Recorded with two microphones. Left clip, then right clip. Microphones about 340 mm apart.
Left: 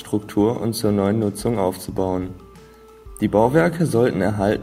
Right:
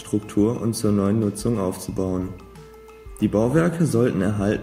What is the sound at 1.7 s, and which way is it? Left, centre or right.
Speech, left.